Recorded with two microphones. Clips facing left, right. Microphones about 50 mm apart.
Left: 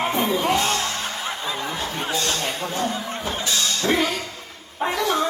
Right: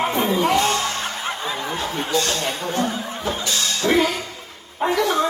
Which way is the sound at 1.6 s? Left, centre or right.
Right.